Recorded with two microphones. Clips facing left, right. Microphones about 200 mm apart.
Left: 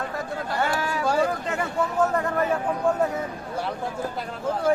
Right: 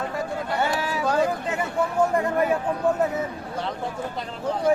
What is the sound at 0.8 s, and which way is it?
Vehicle, 10° right (ahead or behind).